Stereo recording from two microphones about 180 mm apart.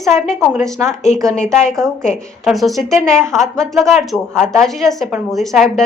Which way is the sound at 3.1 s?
15° right (ahead or behind).